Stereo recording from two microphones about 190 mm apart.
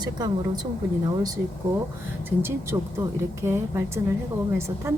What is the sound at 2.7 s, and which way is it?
A woman's voice, 15° right (ahead or behind).